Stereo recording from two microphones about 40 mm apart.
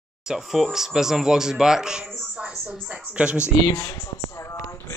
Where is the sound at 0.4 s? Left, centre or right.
Centre.